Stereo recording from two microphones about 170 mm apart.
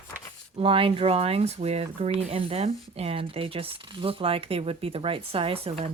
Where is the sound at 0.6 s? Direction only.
30° right (ahead or behind).